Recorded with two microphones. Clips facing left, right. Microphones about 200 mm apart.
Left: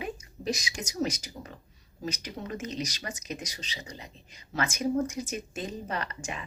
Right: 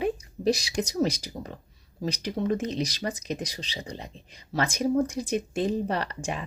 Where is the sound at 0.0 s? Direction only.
35° right (ahead or behind).